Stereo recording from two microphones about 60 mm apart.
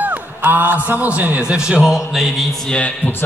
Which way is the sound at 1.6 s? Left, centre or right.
Centre.